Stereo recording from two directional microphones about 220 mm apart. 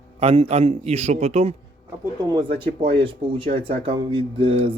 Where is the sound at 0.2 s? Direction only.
25° right (ahead or behind).